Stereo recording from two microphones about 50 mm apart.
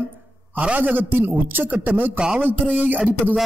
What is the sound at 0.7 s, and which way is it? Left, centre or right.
A man's voice, right.